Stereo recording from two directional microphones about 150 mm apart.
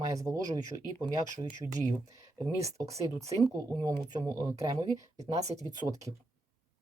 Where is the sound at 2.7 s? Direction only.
20° right (ahead or behind).